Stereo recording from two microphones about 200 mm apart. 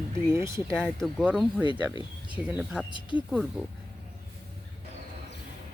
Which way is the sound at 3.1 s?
25° left (ahead or behind).